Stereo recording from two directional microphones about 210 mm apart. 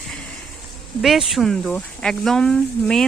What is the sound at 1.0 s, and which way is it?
Speech, centre (ahead or behind).